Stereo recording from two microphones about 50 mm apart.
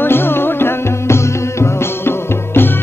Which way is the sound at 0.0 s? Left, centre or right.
Left.